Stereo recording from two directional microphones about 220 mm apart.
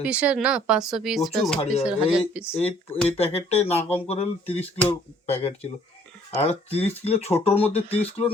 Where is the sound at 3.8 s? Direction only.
10° left (ahead or behind).